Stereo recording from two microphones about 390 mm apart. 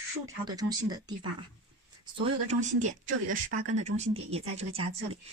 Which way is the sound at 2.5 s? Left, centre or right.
Centre.